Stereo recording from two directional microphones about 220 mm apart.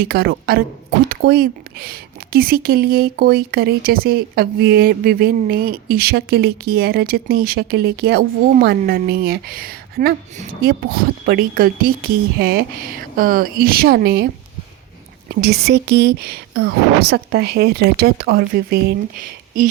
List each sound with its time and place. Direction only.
0.0 s a woman's voice: 45° right (ahead or behind)
15.3 s a woman's voice: 45° right (ahead or behind)